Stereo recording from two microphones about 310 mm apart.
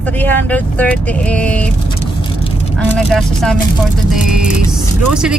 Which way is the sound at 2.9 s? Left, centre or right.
Centre.